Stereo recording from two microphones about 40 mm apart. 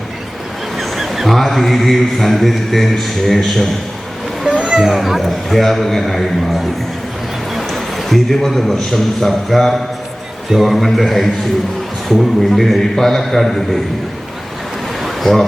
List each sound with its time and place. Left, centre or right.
0.8 s mantra: centre
4.4 s children playing: right
4.8 s mantra: centre
7.5 s a man's voice: centre
10.5 s mantra: centre
12.4 s mantra: centre
15.0 s a sound: centre